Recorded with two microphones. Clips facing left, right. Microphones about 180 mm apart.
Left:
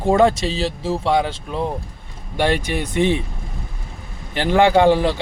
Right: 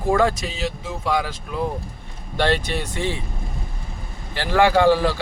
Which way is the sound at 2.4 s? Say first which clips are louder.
Left 2 dB; 15° left (ahead or behind).